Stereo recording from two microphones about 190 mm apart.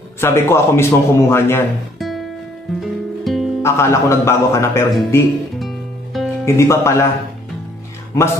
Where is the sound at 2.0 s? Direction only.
Centre (ahead or behind).